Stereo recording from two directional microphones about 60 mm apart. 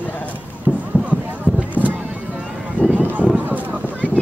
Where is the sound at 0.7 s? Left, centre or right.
Centre.